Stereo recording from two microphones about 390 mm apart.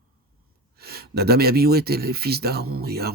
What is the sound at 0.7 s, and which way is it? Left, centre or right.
Speech, right.